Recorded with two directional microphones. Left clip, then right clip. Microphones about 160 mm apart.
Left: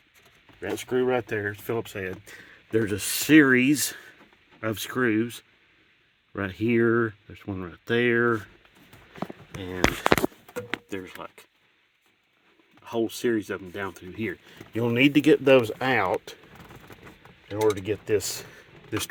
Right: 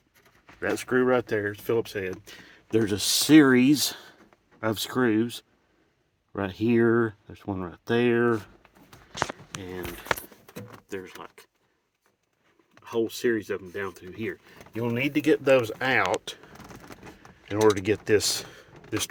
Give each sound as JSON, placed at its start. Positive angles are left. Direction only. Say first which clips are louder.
{"t": 0.6, "sound": "speech", "louder": "right 2 dB", "side_deg": -10}
{"t": 1.3, "sound": "speech", "louder": "right 2 dB", "side_deg": 0}
{"t": 9.6, "sound": "speech", "louder": "left 5 dB", "side_deg": 30}
{"t": 10.8, "sound": "speech", "louder": "left 1 dB", "side_deg": 40}
{"t": 12.8, "sound": "speech", "louder": "even", "side_deg": 40}
{"t": 15.6, "sound": "speech", "louder": "even", "side_deg": 35}
{"t": 16.3, "sound": "speech", "louder": "right 4 dB", "side_deg": 0}
{"t": 17.6, "sound": "speech", "louder": "right 3 dB", "side_deg": -25}
{"t": 18.2, "sound": "speech", "louder": "right 6 dB", "side_deg": -5}
{"t": 18.5, "sound": "a sound", "louder": "even", "side_deg": 15}